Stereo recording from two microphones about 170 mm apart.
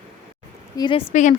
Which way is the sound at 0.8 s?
30° left (ahead or behind).